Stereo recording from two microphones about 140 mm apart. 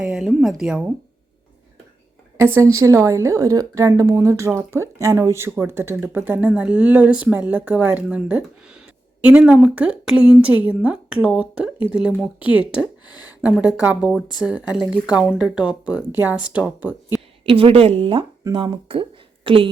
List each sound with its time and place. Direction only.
0.0 s a woman's voice: 5° right (ahead or behind)
2.6 s a woman's voice: 20° right (ahead or behind)
13.2 s a sound: 10° right (ahead or behind)
13.8 s a woman's voice: 10° right (ahead or behind)
17.4 s a woman's voice: 40° right (ahead or behind)